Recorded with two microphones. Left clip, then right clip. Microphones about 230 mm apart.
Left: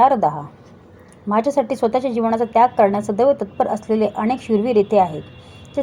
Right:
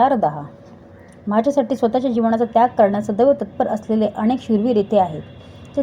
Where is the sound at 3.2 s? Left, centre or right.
Left.